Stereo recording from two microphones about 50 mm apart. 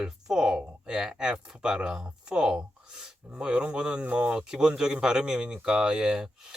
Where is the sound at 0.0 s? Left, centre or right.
Centre; by 4.3 s right.